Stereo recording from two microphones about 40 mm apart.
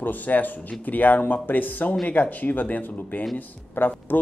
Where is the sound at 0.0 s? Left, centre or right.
Left.